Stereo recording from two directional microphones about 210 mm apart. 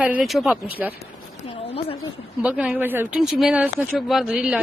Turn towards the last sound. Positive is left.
turn(degrees=-5)  # may be behind; listen again after turning